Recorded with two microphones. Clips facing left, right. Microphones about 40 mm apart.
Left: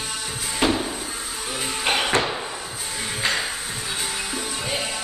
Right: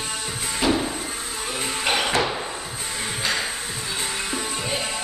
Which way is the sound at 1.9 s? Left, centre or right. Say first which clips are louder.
Left 1 dB; centre.